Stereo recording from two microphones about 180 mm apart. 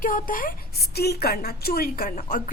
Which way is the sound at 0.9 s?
60° left (ahead or behind).